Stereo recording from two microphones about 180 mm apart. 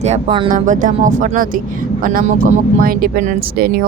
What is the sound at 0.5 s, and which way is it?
Speech, 45° right (ahead or behind).